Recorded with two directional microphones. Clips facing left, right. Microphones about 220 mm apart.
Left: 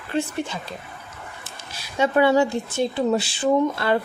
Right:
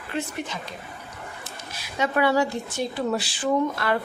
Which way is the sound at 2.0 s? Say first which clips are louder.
Left 4 dB; 25° left (ahead or behind).